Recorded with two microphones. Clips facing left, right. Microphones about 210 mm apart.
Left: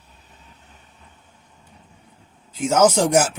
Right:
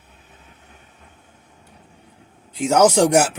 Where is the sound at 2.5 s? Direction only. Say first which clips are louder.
Right 1 dB; 65° right (ahead or behind).